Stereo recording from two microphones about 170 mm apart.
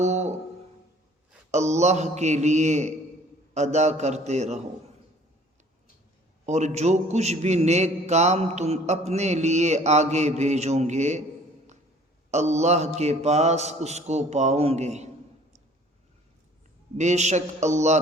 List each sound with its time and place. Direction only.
0.0 s music: 45° right (ahead or behind)
1.5 s a man's voice: 45° right (ahead or behind)
6.4 s a man's voice: 40° right (ahead or behind)
12.3 s a man's voice: 40° right (ahead or behind)
17.0 s a man's voice: 45° right (ahead or behind)